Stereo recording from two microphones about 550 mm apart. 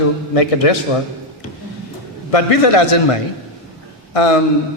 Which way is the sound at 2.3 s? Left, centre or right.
Left.